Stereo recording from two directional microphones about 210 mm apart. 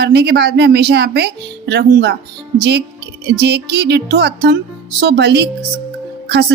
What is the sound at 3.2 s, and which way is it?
A woman's voice, 50° right (ahead or behind).